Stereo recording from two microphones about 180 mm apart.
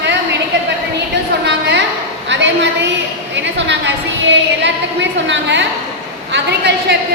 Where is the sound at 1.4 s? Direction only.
75° right (ahead or behind).